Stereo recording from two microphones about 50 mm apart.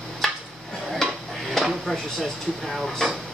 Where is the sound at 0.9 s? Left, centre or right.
Centre.